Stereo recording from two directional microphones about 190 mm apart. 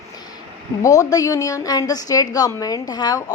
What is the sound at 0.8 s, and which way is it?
A woman's voice, 15° left (ahead or behind).